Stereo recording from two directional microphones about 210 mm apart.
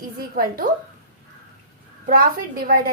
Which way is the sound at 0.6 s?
40° right (ahead or behind).